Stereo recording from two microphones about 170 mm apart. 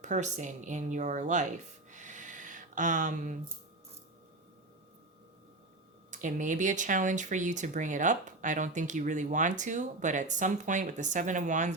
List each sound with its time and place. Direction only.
0.0 s speech: 45° right (ahead or behind)
1.9 s a sound: 45° right (ahead or behind)
6.1 s speech: 50° right (ahead or behind)